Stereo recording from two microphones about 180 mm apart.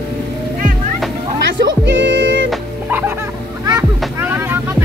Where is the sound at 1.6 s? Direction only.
80° right.